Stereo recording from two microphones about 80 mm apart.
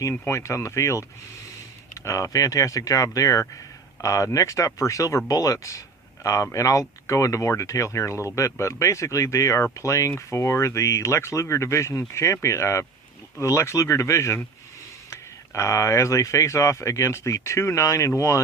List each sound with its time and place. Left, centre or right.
0.3 s speech: left
2.0 s speech: left